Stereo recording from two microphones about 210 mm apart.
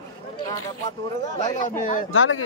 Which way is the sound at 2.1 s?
70° left (ahead or behind).